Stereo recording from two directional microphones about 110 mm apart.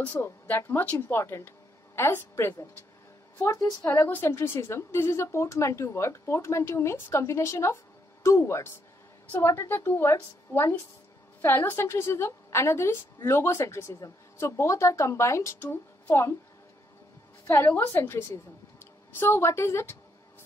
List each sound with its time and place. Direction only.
0.0 s a woman's voice: 20° left (ahead or behind)
17.5 s a woman's voice: 25° left (ahead or behind)